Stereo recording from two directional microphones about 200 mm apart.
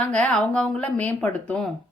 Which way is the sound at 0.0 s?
5° left (ahead or behind).